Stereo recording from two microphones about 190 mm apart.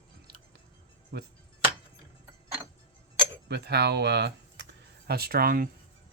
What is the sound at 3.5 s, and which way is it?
Speech, 60° right (ahead or behind).